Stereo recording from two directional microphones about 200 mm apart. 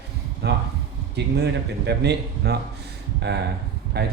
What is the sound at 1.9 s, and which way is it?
A man's voice, 55° right (ahead or behind).